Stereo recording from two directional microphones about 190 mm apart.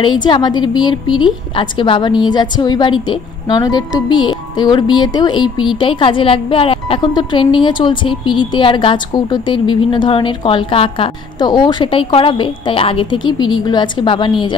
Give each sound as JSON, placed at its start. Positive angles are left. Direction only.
{"t": 0.0, "sound": "a woman's voice", "side_deg": 25}